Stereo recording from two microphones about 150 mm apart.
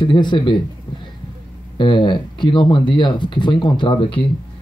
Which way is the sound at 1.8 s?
30° left (ahead or behind).